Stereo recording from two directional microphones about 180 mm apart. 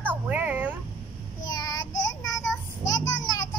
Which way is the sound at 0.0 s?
10° right (ahead or behind).